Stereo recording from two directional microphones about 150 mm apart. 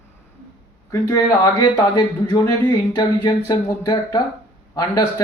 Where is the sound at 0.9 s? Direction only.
20° left (ahead or behind).